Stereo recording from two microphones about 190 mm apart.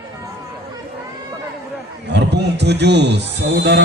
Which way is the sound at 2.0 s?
60° right (ahead or behind).